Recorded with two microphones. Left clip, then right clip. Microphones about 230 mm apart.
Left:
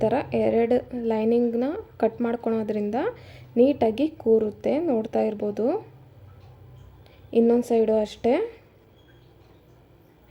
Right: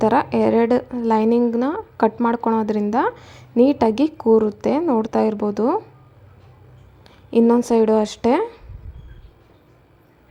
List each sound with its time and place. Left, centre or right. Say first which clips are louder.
0.0 s a woman's voice: right 6 dB; centre
7.3 s a woman's voice: right 4 dB; centre